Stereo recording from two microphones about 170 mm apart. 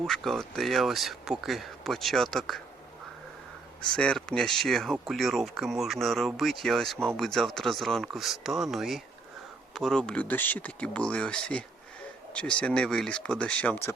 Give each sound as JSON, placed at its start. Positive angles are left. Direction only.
{"t": 0.0, "sound": "speech", "side_deg": 0}
{"t": 3.8, "sound": "speech", "side_deg": 5}